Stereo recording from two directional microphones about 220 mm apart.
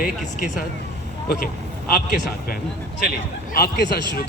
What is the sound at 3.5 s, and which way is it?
Speech, 45° left (ahead or behind).